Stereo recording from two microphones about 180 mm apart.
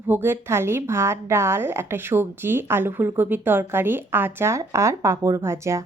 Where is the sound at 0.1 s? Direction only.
15° right (ahead or behind).